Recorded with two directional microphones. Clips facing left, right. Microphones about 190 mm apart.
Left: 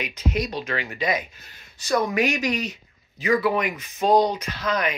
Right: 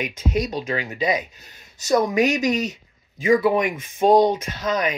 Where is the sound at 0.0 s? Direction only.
50° right (ahead or behind).